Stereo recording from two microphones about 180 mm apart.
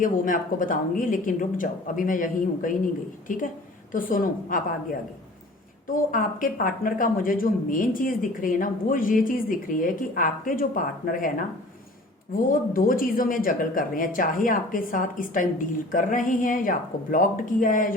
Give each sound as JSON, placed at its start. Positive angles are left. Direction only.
{"t": 0.0, "sound": "speech", "side_deg": 50}
{"t": 5.9, "sound": "speech", "side_deg": 50}
{"t": 12.5, "sound": "speech", "side_deg": 50}